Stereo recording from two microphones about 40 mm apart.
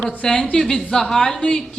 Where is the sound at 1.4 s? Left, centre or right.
Left.